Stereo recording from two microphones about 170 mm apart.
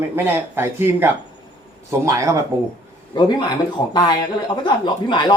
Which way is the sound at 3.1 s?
25° left (ahead or behind).